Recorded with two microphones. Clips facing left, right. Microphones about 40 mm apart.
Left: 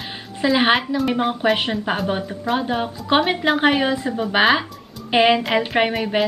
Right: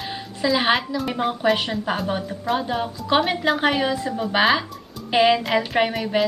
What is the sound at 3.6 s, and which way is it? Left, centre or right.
A woman's voice, left.